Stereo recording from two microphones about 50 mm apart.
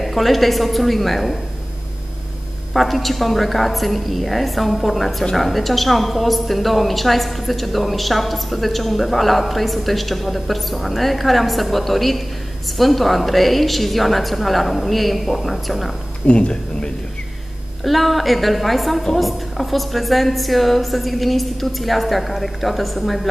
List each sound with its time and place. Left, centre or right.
0.0 s a woman's voice: centre
2.7 s a woman's voice: centre
16.3 s speech: centre
17.8 s a woman's voice: centre